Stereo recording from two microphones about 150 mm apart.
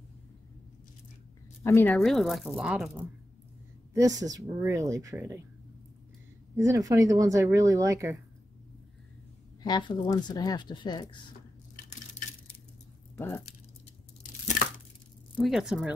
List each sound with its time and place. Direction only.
1.6 s speech: 15° left (ahead or behind)
2.0 s speech: centre (ahead or behind)
3.9 s speech: 25° right (ahead or behind)
6.5 s speech: 20° right (ahead or behind)
9.6 s speech: 30° left (ahead or behind)
13.1 s speech: 15° left (ahead or behind)
15.3 s speech: centre (ahead or behind)